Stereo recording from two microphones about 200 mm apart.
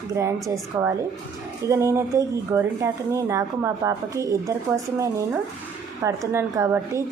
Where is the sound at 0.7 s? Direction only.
15° right (ahead or behind).